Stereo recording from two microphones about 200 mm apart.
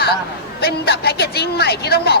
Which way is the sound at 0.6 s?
55° left (ahead or behind).